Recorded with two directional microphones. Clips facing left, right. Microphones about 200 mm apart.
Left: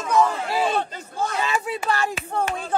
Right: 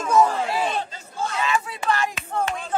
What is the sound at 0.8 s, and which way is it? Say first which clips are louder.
Crowd: left 2 dB; 60° left (ahead or behind).